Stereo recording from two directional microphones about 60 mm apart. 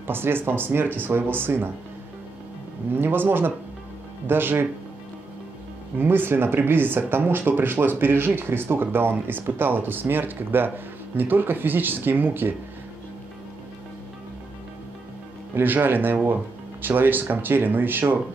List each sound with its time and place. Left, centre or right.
0.0 s speech: right
2.9 s speech: right
5.9 s speech: right
15.5 s speech: right